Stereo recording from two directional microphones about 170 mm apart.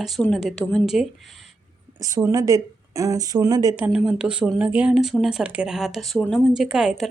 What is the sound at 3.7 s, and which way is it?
Speech, 5° right (ahead or behind).